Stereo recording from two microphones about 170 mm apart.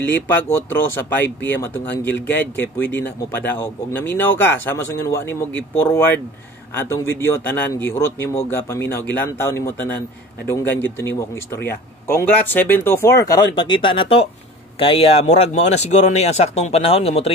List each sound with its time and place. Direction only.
0.0 s speech: 10° left (ahead or behind); by 17.3 s 35° left (ahead or behind)